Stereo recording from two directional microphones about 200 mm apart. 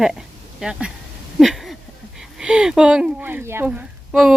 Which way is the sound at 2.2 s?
5° right (ahead or behind).